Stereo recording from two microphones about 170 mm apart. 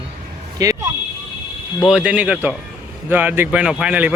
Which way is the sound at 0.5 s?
20° right (ahead or behind).